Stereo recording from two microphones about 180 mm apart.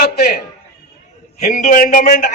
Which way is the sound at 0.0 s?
60° left (ahead or behind).